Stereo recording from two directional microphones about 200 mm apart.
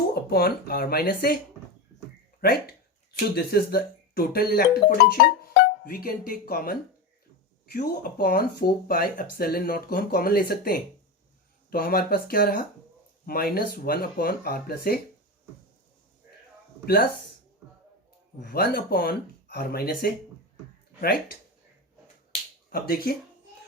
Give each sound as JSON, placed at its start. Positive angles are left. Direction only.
{"t": 0.1, "sound": "speech", "side_deg": 50}
{"t": 2.4, "sound": "speech", "side_deg": 50}
{"t": 16.8, "sound": "speech", "side_deg": 50}
{"t": 18.4, "sound": "speech", "side_deg": 50}
{"t": 22.7, "sound": "speech", "side_deg": 50}